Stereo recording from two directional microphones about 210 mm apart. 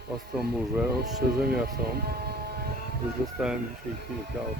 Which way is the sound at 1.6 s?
45° right (ahead or behind).